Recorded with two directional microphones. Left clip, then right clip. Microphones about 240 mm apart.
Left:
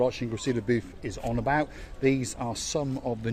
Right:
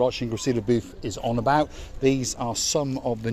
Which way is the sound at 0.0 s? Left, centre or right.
Right.